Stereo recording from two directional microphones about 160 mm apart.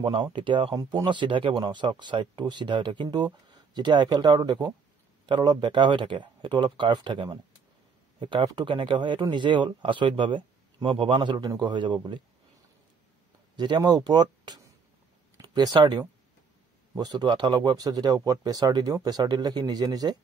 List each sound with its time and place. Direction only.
0.0 s speech: 30° right (ahead or behind)
13.6 s speech: 25° right (ahead or behind)